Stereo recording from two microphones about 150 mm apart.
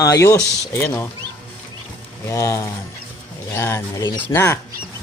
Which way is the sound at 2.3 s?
20° left (ahead or behind).